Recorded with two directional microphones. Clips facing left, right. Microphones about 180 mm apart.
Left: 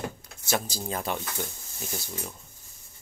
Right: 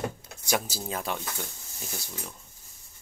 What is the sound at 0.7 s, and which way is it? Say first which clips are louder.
Speech: left 2 dB; centre (ahead or behind).